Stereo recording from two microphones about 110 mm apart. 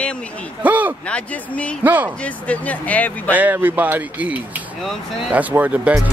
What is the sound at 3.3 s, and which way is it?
Speech, 15° right (ahead or behind).